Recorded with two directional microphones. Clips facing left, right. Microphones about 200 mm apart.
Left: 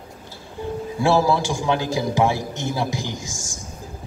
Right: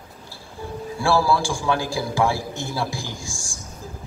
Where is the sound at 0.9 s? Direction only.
20° left (ahead or behind).